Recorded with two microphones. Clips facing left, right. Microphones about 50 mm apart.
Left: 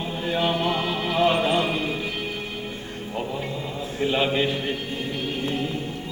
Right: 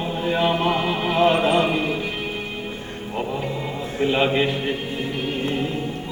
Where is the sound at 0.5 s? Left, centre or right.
Right.